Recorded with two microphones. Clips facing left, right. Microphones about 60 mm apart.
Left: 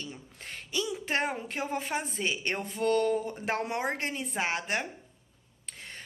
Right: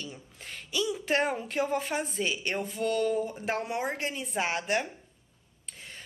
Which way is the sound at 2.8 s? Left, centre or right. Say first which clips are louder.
Left 2 dB; left.